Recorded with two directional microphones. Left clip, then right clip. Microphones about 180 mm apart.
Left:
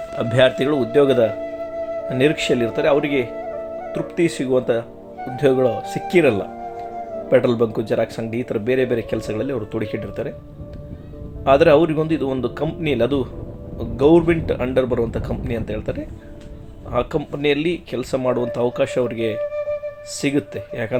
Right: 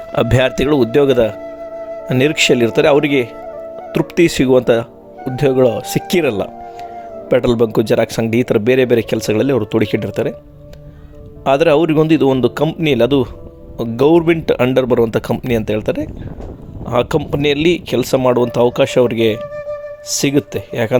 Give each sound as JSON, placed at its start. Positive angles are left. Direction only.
{"t": 0.2, "sound": "speech", "side_deg": -50}
{"t": 11.4, "sound": "speech", "side_deg": -55}